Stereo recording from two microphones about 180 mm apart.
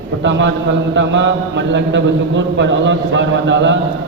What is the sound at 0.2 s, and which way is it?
A man's voice, 90° right.